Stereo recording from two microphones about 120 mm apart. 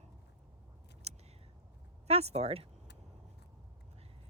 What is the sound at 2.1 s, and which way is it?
Speech, 60° right (ahead or behind).